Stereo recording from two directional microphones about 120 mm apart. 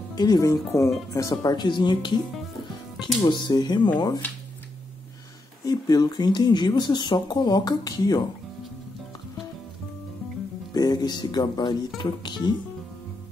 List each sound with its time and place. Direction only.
0.1 s speech: 35° left (ahead or behind)
3.3 s speech: 35° left (ahead or behind)
5.7 s speech: 30° left (ahead or behind)
10.7 s speech: 35° left (ahead or behind)